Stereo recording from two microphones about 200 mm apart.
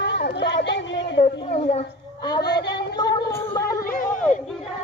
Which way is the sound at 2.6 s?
55° left (ahead or behind).